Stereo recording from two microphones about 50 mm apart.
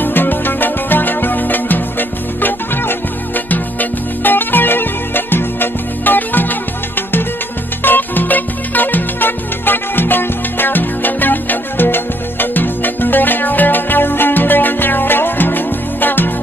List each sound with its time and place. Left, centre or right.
0.0 s music: left